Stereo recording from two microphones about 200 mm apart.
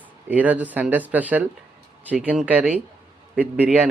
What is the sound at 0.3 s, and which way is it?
Speech, 10° right (ahead or behind).